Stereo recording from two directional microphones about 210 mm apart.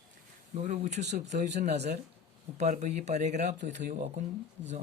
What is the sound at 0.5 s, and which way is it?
Speech, 35° right (ahead or behind).